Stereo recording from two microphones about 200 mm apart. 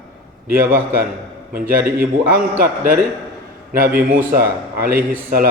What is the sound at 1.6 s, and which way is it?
Speech, 10° right (ahead or behind).